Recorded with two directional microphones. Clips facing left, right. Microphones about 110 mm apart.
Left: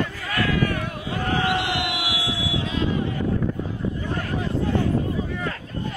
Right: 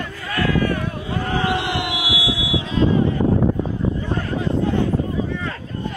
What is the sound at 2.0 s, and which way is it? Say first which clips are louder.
Vehicle: right 3 dB; 45° left (ahead or behind).